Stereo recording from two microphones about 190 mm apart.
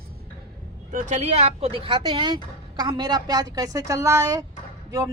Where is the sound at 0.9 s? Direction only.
35° right (ahead or behind).